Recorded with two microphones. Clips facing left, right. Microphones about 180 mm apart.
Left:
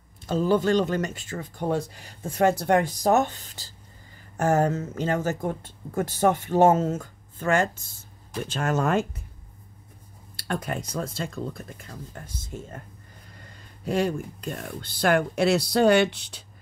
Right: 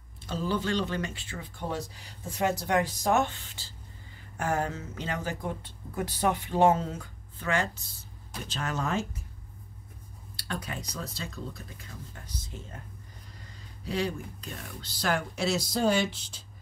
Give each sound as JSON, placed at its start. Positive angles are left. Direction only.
{"t": 0.3, "sound": "speech", "side_deg": 45}
{"t": 3.0, "sound": "speech", "side_deg": 40}
{"t": 10.3, "sound": "speech", "side_deg": 50}
{"t": 13.8, "sound": "speech", "side_deg": 50}